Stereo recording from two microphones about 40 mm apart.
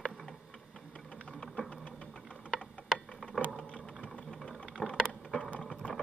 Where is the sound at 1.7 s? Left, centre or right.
Left.